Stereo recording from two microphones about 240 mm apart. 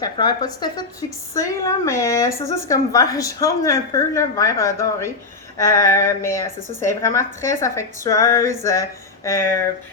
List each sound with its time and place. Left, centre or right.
0.0 s a woman's voice: centre